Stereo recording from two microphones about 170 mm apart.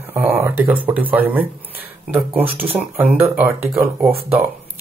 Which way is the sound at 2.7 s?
10° right (ahead or behind).